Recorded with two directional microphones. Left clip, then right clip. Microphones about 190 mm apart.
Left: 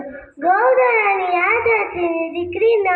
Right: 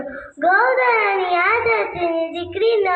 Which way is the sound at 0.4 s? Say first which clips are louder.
Left 1 dB; 30° right (ahead or behind).